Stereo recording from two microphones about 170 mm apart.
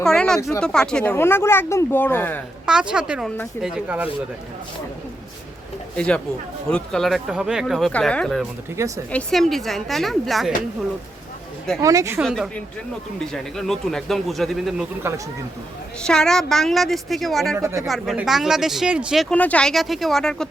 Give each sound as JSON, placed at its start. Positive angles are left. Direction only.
{"t": 0.0, "sound": "speech", "side_deg": 5}
{"t": 2.6, "sound": "speech", "side_deg": -5}
{"t": 6.0, "sound": "speech", "side_deg": 5}
{"t": 8.8, "sound": "speech", "side_deg": -15}
{"t": 9.1, "sound": "speech", "side_deg": 0}
{"t": 11.8, "sound": "speech", "side_deg": -20}
{"t": 12.2, "sound": "speech", "side_deg": 0}
{"t": 15.1, "sound": "speech", "side_deg": -15}
{"t": 16.0, "sound": "speech", "side_deg": 5}
{"t": 17.6, "sound": "speech", "side_deg": -20}
{"t": 17.8, "sound": "speech", "side_deg": 0}